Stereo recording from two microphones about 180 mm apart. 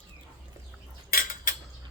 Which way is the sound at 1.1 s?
50° left (ahead or behind).